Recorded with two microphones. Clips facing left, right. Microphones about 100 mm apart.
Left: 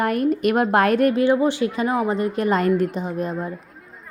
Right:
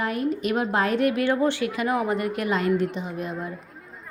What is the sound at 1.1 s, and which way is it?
A woman's voice, 15° left (ahead or behind).